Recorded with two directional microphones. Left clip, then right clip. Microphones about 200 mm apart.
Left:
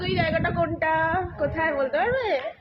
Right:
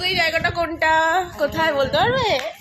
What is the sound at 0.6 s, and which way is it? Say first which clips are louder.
A woman's voice: right 6 dB; 20° right (ahead or behind).